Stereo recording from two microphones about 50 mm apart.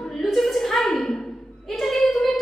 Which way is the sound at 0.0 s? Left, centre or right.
Centre.